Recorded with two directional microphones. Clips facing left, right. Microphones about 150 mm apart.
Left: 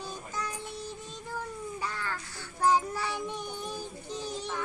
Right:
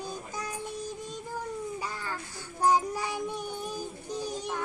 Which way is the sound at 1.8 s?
10° right (ahead or behind).